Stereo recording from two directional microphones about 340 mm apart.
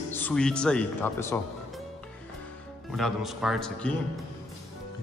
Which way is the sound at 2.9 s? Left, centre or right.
Centre.